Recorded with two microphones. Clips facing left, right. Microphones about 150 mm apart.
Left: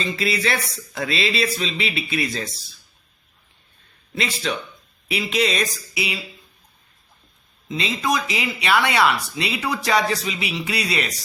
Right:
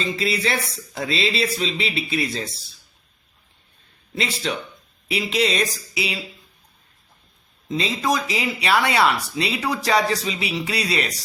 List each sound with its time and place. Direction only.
0.2 s speech: 25° right (ahead or behind)
4.1 s speech: 30° right (ahead or behind)
7.7 s speech: 35° right (ahead or behind)